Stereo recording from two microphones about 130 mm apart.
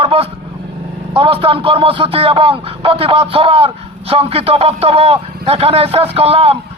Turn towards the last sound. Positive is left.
turn(degrees=-50)  # may be behind; listen again after turning